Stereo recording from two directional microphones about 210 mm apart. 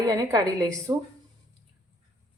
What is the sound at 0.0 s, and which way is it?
Speech, 15° right (ahead or behind).